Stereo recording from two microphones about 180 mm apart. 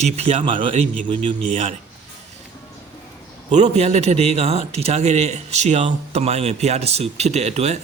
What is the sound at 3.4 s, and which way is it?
A man's voice, 35° right (ahead or behind).